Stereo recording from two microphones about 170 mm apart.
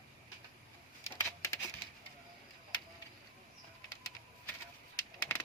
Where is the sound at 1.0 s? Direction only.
15° left (ahead or behind).